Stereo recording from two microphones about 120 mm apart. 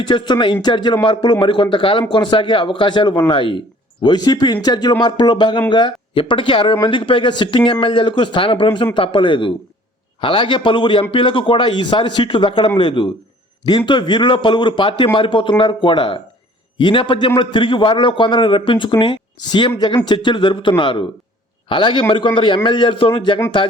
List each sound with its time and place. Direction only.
0.0 s a man's voice: 40° left (ahead or behind)